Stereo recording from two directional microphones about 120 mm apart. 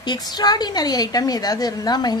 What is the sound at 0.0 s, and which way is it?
A woman's voice, 35° left (ahead or behind).